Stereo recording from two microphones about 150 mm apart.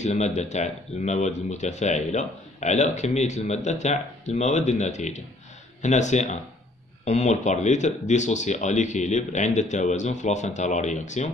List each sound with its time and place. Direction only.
0.0 s speech: 50° left (ahead or behind)